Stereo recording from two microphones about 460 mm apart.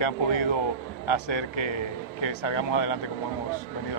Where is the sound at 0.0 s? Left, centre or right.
Left.